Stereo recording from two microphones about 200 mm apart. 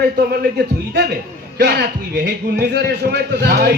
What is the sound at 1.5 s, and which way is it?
A man's voice, 55° right (ahead or behind).